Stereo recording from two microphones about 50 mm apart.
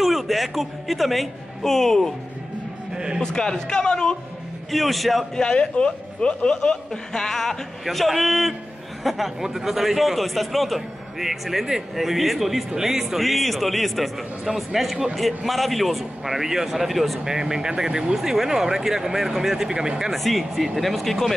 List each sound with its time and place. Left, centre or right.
0.0 s a man's voice: centre
2.9 s a man's voice: centre
3.3 s speech: centre
4.6 s a man's voice: centre
5.3 s a man's voice: centre
17.2 s speech: centre
20.1 s a man's voice: centre